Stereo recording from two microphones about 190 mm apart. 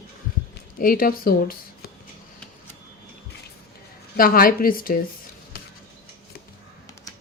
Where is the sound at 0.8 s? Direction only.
50° left (ahead or behind).